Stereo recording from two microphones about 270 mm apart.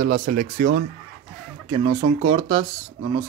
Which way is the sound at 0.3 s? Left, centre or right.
Right.